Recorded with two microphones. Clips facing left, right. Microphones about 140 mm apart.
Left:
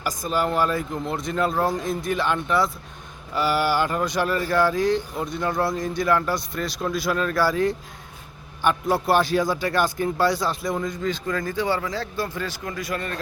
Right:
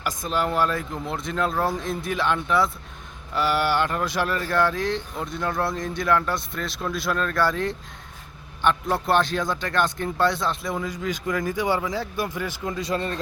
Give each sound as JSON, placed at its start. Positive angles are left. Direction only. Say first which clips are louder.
{"t": 0.0, "sound": "speech", "louder": "left 1 dB", "side_deg": 0}
{"t": 10.9, "sound": "speech", "louder": "left 1 dB", "side_deg": -10}